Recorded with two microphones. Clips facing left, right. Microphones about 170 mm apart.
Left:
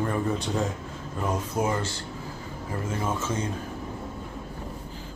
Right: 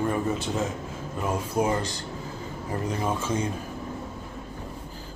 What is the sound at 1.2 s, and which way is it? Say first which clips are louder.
Speech: right 1 dB; 15° right (ahead or behind).